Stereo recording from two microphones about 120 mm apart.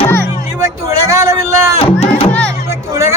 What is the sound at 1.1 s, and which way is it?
Vehicle, 25° right (ahead or behind).